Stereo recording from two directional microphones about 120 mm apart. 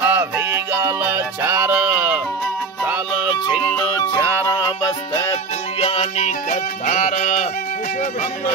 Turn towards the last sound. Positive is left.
turn(degrees=80)